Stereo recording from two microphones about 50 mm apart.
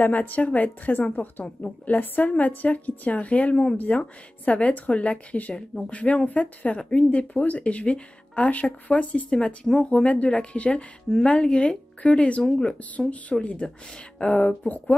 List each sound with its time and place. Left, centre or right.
0.0 s a woman's voice: left